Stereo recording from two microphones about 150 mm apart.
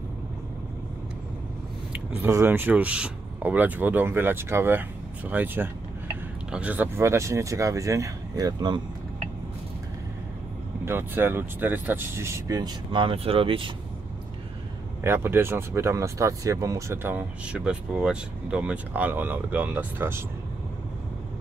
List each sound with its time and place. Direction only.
2.2 s speech: 15° right (ahead or behind)
10.9 s speech: 15° right (ahead or behind); by 13.7 s 35° right (ahead or behind)
15.0 s speech: 15° right (ahead or behind)